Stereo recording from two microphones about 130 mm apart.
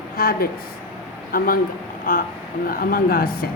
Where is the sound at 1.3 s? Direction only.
90° left.